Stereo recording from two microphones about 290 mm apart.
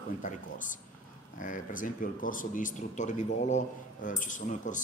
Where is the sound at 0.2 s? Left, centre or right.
Left.